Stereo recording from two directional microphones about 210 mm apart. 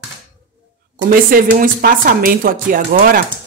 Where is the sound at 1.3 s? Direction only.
40° right (ahead or behind).